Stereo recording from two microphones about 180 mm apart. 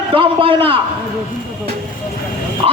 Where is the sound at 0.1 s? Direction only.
30° right (ahead or behind).